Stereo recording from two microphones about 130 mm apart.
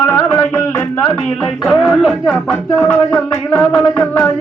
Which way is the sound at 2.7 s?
15° left (ahead or behind).